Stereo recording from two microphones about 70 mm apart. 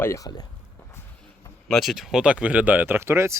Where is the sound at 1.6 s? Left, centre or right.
Centre; by 3.3 s right.